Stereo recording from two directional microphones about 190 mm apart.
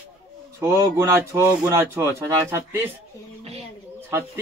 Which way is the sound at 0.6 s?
15° right (ahead or behind).